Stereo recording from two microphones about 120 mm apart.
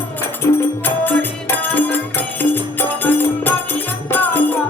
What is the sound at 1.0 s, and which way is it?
Music, 15° left (ahead or behind).